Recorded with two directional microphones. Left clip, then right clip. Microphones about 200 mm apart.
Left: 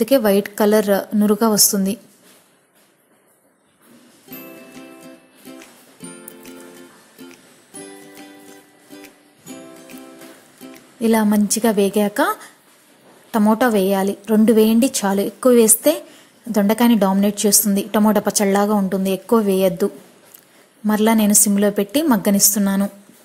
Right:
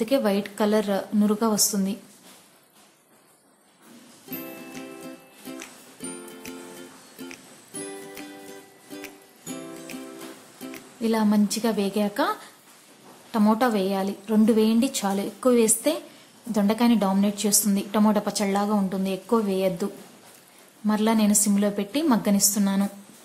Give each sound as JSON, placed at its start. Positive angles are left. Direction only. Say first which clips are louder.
{"t": 0.0, "sound": "a woman's voice", "louder": "left 8 dB", "side_deg": 30}
{"t": 4.3, "sound": "music", "louder": "even", "side_deg": 0}
{"t": 11.0, "sound": "a woman's voice", "louder": "left 6 dB", "side_deg": 30}